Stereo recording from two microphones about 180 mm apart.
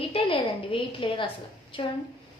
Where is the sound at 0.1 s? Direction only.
30° left (ahead or behind).